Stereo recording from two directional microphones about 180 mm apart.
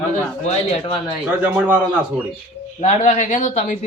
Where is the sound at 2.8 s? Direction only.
40° left (ahead or behind).